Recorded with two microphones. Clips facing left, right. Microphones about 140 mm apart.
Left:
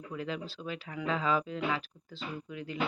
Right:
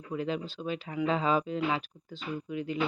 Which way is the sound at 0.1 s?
25° right (ahead or behind).